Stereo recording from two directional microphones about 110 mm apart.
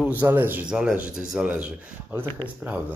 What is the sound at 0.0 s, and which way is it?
A man's voice, 15° right (ahead or behind).